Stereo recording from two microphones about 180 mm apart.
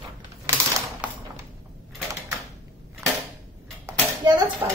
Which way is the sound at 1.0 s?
10° right (ahead or behind).